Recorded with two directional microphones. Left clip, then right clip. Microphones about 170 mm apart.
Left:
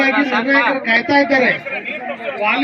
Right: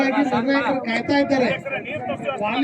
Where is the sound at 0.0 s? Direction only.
30° right (ahead or behind).